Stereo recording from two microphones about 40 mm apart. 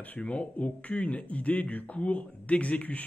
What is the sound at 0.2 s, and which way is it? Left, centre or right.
Speech, left.